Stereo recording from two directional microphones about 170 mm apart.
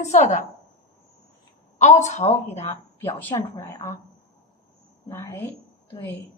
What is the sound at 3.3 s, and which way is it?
Speech, 20° left (ahead or behind).